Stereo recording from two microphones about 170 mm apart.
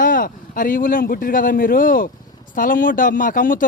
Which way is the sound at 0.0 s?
55° left (ahead or behind).